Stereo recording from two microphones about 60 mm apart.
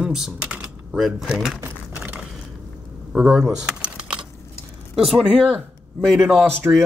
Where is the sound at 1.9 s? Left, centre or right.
Right.